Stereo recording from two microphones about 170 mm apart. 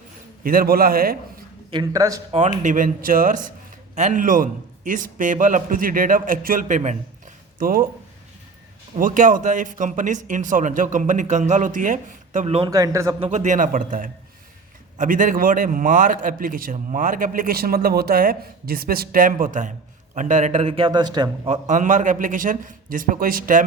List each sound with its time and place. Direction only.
0.4 s a man's voice: 60° right (ahead or behind)
1.7 s a man's voice: 25° right (ahead or behind)
2.6 s a man's voice: 50° right (ahead or behind)
9.0 s a man's voice: 50° right (ahead or behind)
12.5 s a man's voice: 25° right (ahead or behind)
13.1 s a man's voice: 40° right (ahead or behind); by 21.2 s 25° right (ahead or behind)
21.4 s a man's voice: 45° right (ahead or behind)